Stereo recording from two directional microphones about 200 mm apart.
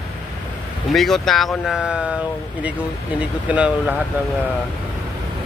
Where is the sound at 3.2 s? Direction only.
5° right (ahead or behind).